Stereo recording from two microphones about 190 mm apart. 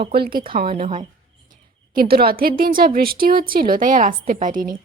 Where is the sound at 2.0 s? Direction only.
55° right (ahead or behind).